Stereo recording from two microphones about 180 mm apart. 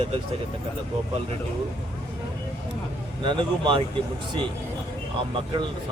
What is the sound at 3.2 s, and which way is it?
Speech, 25° right (ahead or behind).